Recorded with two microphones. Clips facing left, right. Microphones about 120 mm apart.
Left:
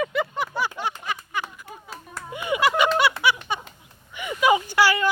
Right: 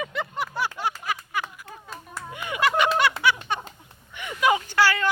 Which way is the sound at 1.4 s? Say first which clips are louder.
Left 1 dB; 10° left (ahead or behind).